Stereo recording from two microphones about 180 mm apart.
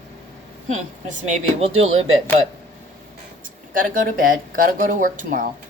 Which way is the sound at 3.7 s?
50° right (ahead or behind).